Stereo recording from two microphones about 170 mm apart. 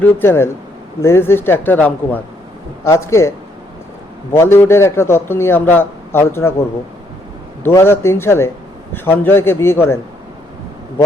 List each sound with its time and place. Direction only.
0.0 s a man's voice: 15° left (ahead or behind)
7.6 s a man's voice: 15° left (ahead or behind)